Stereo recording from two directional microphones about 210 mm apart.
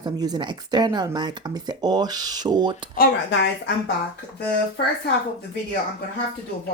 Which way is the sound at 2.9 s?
50° left (ahead or behind).